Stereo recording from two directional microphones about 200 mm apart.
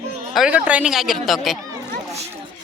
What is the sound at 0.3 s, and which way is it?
Speech, 5° right (ahead or behind).